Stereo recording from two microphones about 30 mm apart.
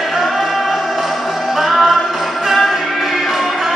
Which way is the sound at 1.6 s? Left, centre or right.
Centre.